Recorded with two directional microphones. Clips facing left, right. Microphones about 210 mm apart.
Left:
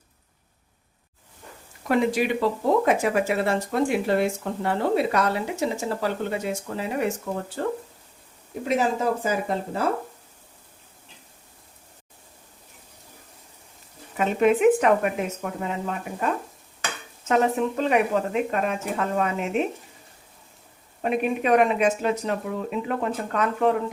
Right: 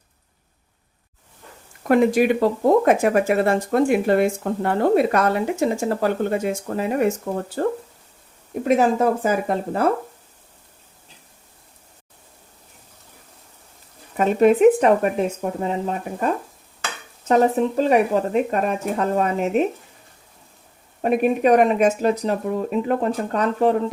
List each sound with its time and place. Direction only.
1.8 s speech: 50° right (ahead or behind)
14.2 s speech: 40° right (ahead or behind)
21.0 s speech: 40° right (ahead or behind)